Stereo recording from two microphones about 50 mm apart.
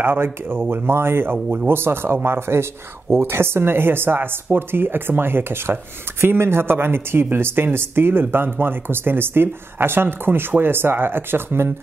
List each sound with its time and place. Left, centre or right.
0.0 s speech: right